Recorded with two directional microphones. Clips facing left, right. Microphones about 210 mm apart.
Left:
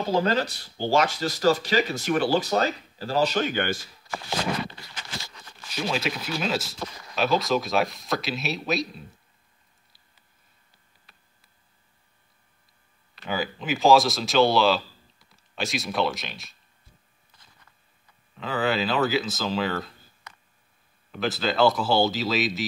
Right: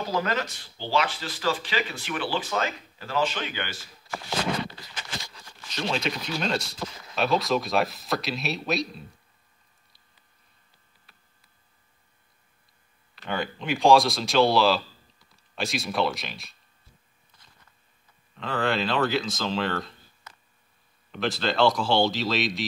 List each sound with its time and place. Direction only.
0.0 s speech: 30° left (ahead or behind); by 3.7 s 45° left (ahead or behind)
5.7 s speech: 5° left (ahead or behind)
13.2 s speech: centre (ahead or behind)
18.3 s speech: centre (ahead or behind)